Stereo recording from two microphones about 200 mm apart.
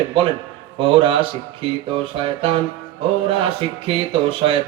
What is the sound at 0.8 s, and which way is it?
Speech, 25° right (ahead or behind).